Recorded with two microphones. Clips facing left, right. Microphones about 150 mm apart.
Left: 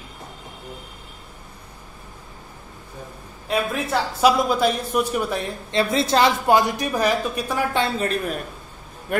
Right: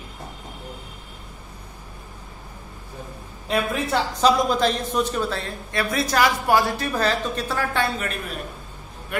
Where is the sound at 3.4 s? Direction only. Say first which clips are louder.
Even; centre (ahead or behind); by 7.9 s 15° left (ahead or behind).